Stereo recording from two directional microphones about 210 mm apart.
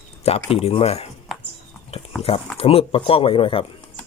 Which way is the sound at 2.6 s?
25° left (ahead or behind).